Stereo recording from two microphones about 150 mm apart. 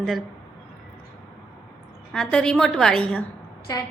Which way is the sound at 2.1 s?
5° left (ahead or behind).